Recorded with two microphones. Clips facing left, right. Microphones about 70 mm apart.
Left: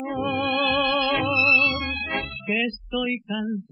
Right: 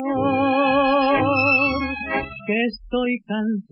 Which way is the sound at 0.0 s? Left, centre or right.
Centre.